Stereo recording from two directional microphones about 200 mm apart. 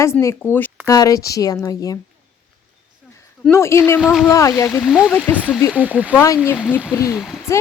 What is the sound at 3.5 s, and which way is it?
Speech, 15° left (ahead or behind).